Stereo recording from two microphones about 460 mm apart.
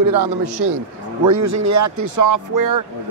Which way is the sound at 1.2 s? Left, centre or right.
Right.